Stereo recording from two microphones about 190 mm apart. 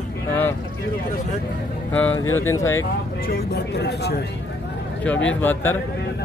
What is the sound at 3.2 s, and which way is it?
Speech, 55° left (ahead or behind).